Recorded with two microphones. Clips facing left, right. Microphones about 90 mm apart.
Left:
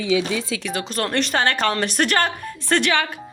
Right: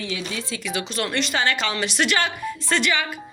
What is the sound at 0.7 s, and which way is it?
A woman's voice, 40° left (ahead or behind).